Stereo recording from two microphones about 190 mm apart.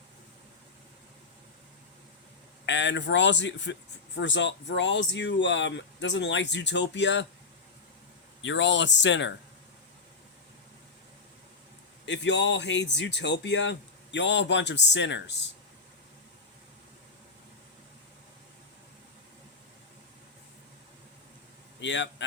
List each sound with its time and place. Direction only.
2.6 s speech: 70° left (ahead or behind)
8.4 s speech: 75° left (ahead or behind)
12.0 s speech: 70° left (ahead or behind)
21.8 s speech: 70° left (ahead or behind)